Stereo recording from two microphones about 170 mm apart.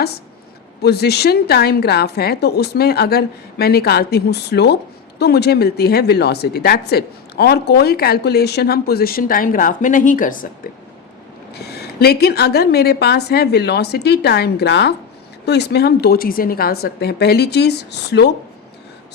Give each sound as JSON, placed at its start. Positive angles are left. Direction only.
{"t": 0.8, "sound": "speech", "side_deg": 75}
{"t": 11.5, "sound": "speech", "side_deg": 70}